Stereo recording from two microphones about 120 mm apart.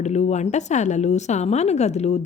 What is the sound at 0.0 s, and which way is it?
A woman's voice, 70° left (ahead or behind).